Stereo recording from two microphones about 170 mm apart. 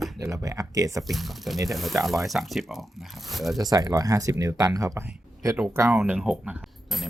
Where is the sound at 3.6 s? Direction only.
20° right (ahead or behind).